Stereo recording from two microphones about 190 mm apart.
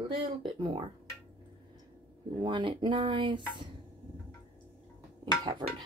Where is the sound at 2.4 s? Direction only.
25° right (ahead or behind).